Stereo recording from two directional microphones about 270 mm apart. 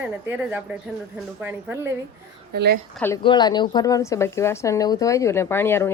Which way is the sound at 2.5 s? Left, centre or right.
Right.